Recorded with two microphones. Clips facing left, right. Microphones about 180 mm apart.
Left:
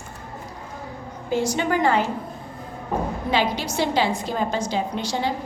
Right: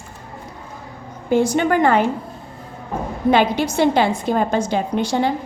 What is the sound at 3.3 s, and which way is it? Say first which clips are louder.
A woman's voice: right 9 dB; 55° right (ahead or behind).